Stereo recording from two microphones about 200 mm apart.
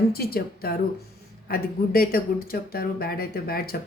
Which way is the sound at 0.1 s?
50° left (ahead or behind).